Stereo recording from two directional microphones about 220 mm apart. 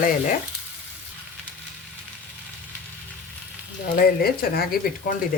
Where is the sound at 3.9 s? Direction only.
45° left (ahead or behind).